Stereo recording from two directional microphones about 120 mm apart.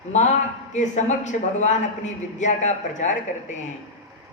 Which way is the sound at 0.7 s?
85° left.